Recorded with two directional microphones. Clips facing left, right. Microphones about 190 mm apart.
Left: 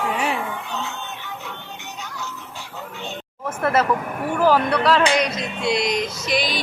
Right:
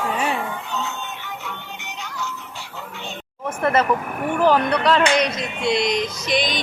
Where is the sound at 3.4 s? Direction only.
5° left (ahead or behind).